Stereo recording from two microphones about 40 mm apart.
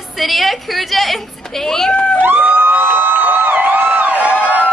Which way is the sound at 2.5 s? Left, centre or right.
Right.